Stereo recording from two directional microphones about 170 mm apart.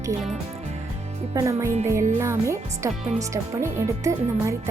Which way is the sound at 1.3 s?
20° right (ahead or behind).